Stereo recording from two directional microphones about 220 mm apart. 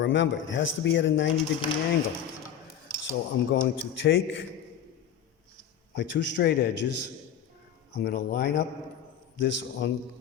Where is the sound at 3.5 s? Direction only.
55° left (ahead or behind).